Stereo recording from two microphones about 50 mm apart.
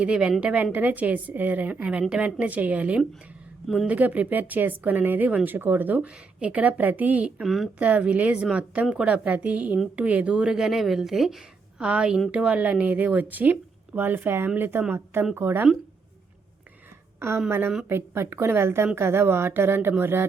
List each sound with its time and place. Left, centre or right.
0.0 s a woman's voice: right
2.4 s speech: right
5.5 s speech: right
6.0 s a woman's voice: right
7.4 s speech: centre
7.8 s a woman's voice: right
9.2 s a woman's voice: right
10.5 s speech: centre
11.8 s a woman's voice: centre; by 15.6 s right
17.2 s a woman's voice: right